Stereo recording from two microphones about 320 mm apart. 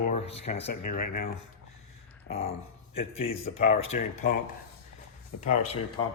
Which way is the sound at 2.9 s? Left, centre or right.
Centre.